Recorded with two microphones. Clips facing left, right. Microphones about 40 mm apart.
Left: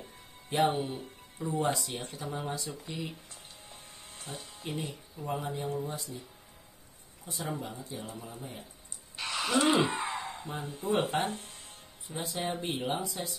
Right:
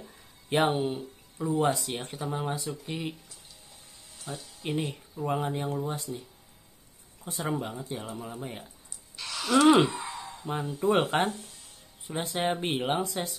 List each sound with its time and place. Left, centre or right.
0.5 s speech: right
2.1 s speech: right
4.4 s a sound: left
4.6 s speech: right
7.2 s speech: right
9.1 s a sound: left
9.6 s speech: right
9.8 s a sound: left
10.4 s speech: right
11.2 s music: left
12.1 s speech: right